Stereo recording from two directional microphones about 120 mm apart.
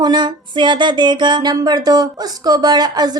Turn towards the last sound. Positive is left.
turn(degrees=-35)  # may be behind; listen again after turning